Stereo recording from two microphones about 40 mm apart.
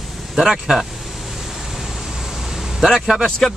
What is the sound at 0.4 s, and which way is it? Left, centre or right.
Speech, centre.